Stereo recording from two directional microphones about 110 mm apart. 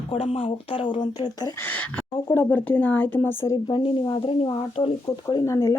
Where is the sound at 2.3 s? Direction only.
15° left (ahead or behind).